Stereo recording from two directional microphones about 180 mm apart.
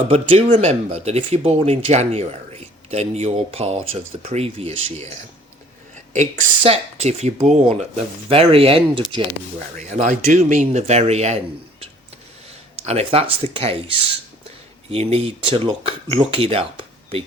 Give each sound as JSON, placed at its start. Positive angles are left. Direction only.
{"t": 0.1, "sound": "speech", "side_deg": -35}
{"t": 6.6, "sound": "speech", "side_deg": -35}
{"t": 9.7, "sound": "speech", "side_deg": -45}
{"t": 12.8, "sound": "speech", "side_deg": -35}